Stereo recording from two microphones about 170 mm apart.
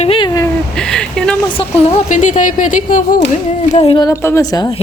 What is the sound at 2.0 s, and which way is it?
Speech, 50° left (ahead or behind).